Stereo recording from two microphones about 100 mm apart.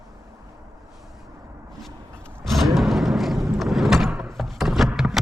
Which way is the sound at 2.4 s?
Centre (ahead or behind).